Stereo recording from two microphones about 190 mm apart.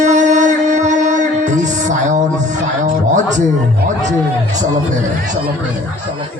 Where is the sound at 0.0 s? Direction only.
40° right (ahead or behind).